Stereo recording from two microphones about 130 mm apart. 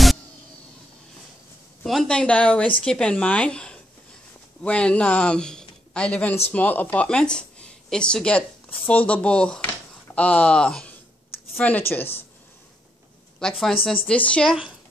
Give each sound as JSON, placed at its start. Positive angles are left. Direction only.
{"t": 1.9, "sound": "speech", "side_deg": 5}
{"t": 13.4, "sound": "a woman's voice", "side_deg": 5}